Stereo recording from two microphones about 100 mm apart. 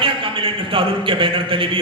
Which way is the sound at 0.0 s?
60° right (ahead or behind).